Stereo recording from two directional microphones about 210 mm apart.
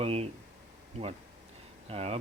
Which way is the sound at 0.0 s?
25° right (ahead or behind).